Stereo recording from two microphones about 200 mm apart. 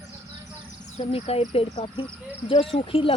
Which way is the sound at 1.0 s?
30° left (ahead or behind).